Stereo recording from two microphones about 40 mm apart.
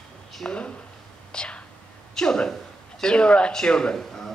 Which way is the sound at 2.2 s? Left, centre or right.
Centre.